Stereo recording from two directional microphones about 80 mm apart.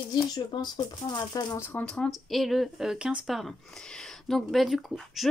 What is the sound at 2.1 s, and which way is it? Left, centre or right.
Speech, centre.